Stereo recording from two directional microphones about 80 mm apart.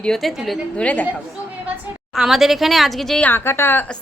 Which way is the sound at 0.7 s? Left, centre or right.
Centre.